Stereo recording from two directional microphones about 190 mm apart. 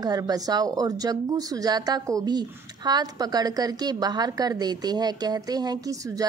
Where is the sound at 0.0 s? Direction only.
20° right (ahead or behind).